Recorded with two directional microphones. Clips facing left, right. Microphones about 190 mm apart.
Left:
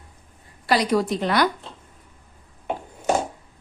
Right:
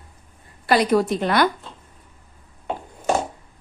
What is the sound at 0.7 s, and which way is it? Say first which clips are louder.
Speech: right 3 dB; 55° right (ahead or behind).